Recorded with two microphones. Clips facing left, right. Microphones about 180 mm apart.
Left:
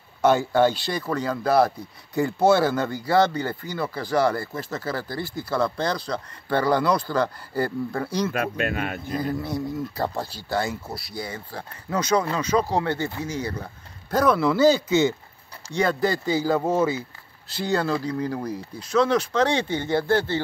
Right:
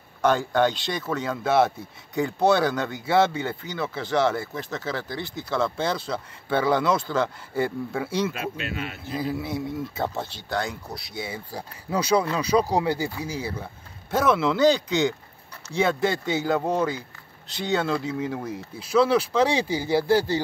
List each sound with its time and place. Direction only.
0.2 s speech: 10° left (ahead or behind)
8.3 s speech: 55° left (ahead or behind)
9.1 s speech: 5° right (ahead or behind)